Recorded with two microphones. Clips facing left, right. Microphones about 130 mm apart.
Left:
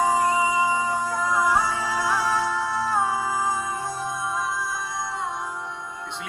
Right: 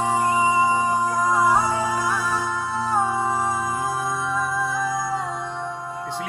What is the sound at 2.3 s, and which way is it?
Music, 20° right (ahead or behind).